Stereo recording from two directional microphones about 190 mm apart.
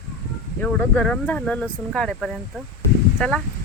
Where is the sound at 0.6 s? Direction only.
5° left (ahead or behind).